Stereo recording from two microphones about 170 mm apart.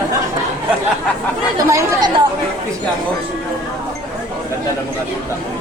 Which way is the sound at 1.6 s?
20° right (ahead or behind).